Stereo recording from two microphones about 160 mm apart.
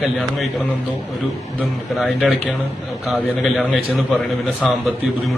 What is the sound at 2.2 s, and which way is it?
A man's voice, centre (ahead or behind).